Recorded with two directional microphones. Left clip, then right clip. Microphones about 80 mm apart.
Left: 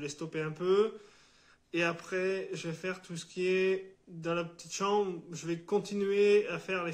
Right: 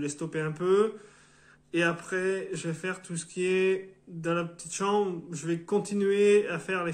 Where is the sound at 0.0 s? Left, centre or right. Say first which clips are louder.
Right 4 dB; centre.